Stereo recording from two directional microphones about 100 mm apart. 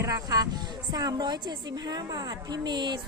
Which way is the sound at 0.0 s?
35° right (ahead or behind).